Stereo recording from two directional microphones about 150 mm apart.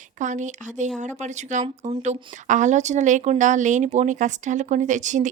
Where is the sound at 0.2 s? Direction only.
55° right (ahead or behind).